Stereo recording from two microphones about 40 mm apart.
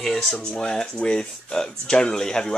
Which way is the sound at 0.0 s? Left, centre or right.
Centre.